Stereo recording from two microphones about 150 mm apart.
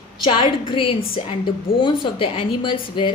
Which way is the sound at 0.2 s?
35° left (ahead or behind).